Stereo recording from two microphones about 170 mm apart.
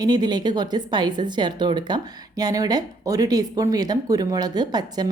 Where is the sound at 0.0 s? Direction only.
25° right (ahead or behind).